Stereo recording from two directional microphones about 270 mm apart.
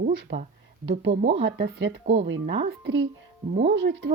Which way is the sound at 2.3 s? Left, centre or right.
Right.